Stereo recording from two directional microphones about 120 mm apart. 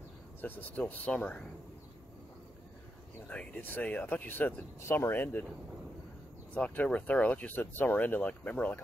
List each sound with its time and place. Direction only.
0.4 s speech: 15° left (ahead or behind)
3.3 s speech: 10° left (ahead or behind)
6.5 s speech: 10° left (ahead or behind)